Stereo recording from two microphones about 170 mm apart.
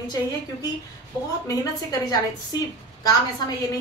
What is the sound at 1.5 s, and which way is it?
A woman's voice, 20° left (ahead or behind).